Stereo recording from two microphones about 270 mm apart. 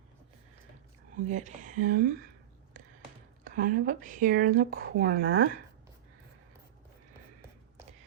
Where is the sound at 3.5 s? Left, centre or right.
Right.